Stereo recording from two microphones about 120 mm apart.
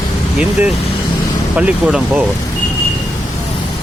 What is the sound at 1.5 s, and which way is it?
Speech, 10° right (ahead or behind).